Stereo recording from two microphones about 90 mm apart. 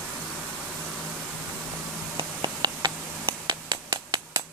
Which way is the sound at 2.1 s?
55° right (ahead or behind).